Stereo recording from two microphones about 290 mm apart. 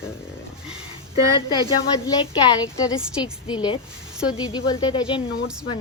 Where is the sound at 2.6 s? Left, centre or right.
Centre.